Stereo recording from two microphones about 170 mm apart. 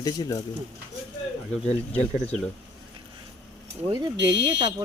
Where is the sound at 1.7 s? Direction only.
35° left (ahead or behind).